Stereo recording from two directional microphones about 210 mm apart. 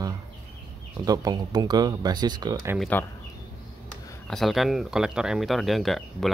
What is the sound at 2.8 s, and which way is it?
Speech, 10° left (ahead or behind).